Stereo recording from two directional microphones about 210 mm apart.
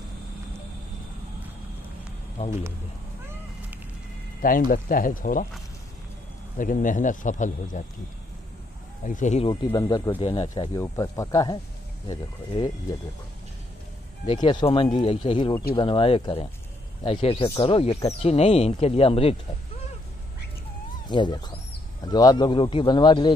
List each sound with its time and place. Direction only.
2.4 s speech: 30° left (ahead or behind)
4.4 s speech: 40° left (ahead or behind)
6.6 s speech: 40° left (ahead or behind)
9.0 s speech: 35° left (ahead or behind); by 10.2 s 20° left (ahead or behind)
10.2 s speech: 30° left (ahead or behind)
10.5 s speech: 15° left (ahead or behind)
14.2 s speech: 25° left (ahead or behind)
21.1 s speech: 20° left (ahead or behind)